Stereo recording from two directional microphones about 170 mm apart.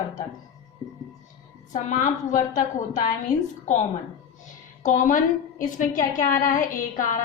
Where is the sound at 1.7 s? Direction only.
45° left (ahead or behind).